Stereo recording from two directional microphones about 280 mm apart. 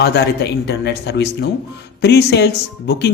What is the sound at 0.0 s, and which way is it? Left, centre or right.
Speech, left.